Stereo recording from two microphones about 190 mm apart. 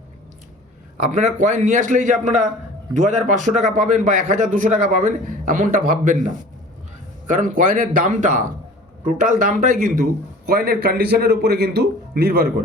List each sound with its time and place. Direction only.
0.9 s a man's voice: 40° right (ahead or behind); by 12.6 s 55° right (ahead or behind)